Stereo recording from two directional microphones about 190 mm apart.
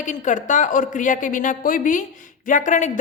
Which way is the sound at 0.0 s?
40° left (ahead or behind).